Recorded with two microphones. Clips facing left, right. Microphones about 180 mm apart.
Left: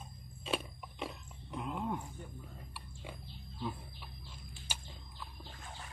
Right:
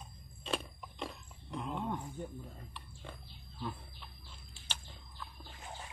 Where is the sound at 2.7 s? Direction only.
10° left (ahead or behind).